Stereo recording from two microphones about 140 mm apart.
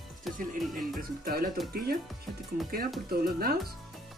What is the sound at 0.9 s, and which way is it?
Speech, 90° right.